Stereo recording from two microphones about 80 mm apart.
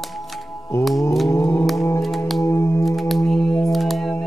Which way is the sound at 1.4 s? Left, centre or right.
Centre.